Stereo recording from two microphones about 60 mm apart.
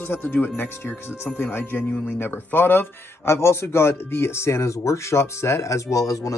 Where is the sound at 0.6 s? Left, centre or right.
Left.